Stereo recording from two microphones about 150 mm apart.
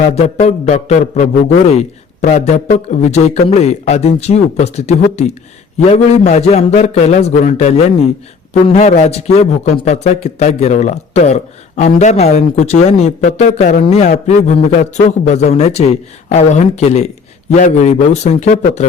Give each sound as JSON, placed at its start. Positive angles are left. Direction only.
{"t": 0.3, "sound": "a man's voice", "side_deg": 45}